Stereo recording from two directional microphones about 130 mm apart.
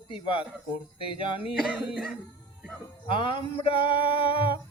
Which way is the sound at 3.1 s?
40° left (ahead or behind).